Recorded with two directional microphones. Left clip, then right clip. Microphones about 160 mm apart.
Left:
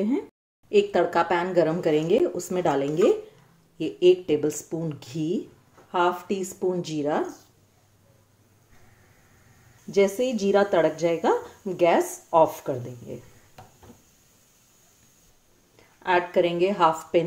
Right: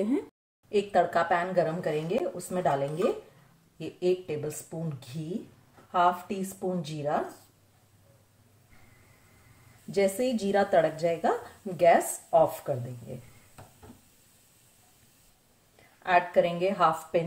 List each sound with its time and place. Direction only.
0.7 s a woman's voice: 30° left (ahead or behind)
1.5 s speech: 55° left (ahead or behind)
5.9 s speech: 45° left (ahead or behind)
9.8 s a woman's voice: 20° left (ahead or behind)
16.0 s a woman's voice: 35° left (ahead or behind)